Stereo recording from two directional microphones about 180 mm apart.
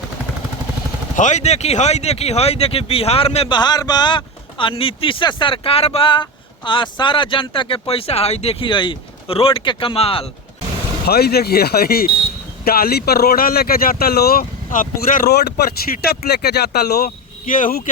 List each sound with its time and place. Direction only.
1.1 s speech: 45° left (ahead or behind)
11.0 s speech: 60° left (ahead or behind)